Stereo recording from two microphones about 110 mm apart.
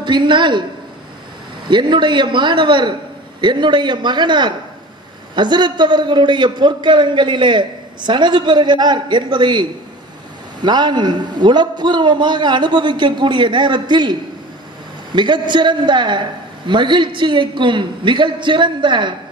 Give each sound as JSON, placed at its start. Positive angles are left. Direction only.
{"t": 0.0, "sound": "a man's voice", "side_deg": -45}
{"t": 1.7, "sound": "a man's voice", "side_deg": -45}
{"t": 15.1, "sound": "a man's voice", "side_deg": -45}